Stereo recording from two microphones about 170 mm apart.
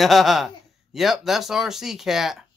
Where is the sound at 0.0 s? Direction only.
Centre (ahead or behind).